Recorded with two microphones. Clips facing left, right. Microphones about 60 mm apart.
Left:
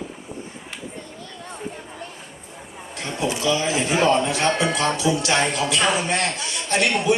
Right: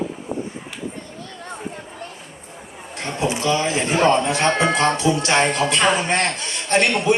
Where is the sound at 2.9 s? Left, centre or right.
Right.